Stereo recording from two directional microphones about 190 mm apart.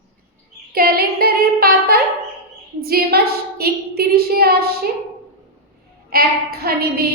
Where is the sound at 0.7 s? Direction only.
50° right (ahead or behind).